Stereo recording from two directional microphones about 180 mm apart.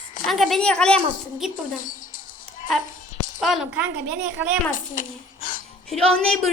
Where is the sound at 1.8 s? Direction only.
50° left (ahead or behind).